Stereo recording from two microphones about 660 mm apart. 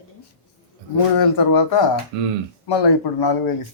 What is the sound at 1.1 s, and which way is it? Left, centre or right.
Speech, left.